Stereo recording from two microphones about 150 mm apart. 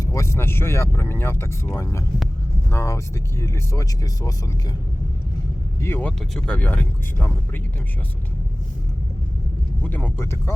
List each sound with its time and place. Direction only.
0.0 s speech: 20° left (ahead or behind)
5.8 s speech: 15° left (ahead or behind)
9.8 s speech: 10° left (ahead or behind)